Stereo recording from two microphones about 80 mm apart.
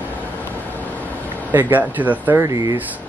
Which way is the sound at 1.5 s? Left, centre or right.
Right.